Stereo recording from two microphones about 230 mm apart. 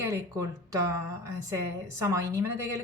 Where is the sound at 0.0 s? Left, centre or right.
Centre.